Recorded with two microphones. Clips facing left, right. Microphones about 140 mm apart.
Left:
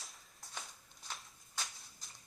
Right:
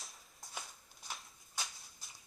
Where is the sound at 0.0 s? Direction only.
Centre (ahead or behind).